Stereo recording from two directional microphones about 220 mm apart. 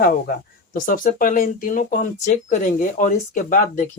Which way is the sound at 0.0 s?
40° left (ahead or behind).